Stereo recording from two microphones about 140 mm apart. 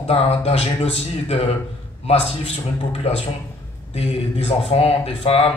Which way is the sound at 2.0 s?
45° left (ahead or behind).